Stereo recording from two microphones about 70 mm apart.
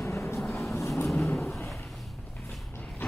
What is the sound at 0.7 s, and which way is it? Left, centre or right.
Vehicle, left.